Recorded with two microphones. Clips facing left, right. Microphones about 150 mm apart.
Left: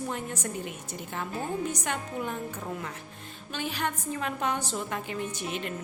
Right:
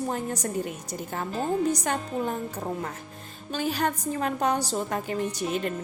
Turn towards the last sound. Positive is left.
turn(degrees=-35)  # may be behind; listen again after turning